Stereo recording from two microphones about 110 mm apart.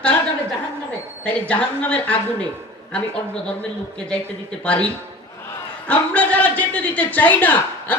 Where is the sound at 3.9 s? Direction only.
10° left (ahead or behind).